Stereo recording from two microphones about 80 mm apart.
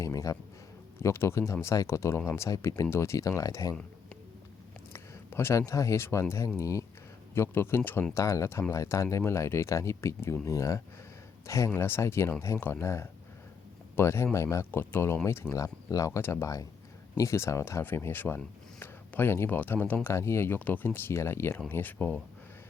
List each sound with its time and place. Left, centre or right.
0.0 s a sound: left
0.9 s speech: left
4.9 s speech: left
7.3 s speech: left